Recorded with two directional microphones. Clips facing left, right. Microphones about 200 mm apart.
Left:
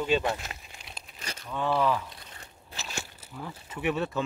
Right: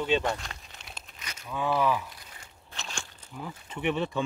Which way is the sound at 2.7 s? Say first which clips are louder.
Left 2 dB; 5° left (ahead or behind).